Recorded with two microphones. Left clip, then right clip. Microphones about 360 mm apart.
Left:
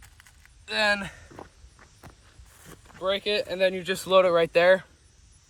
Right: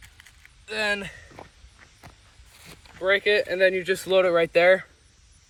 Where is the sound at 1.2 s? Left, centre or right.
Centre.